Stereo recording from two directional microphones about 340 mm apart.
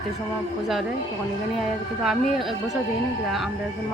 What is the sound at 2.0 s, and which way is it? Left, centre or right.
Speech, centre.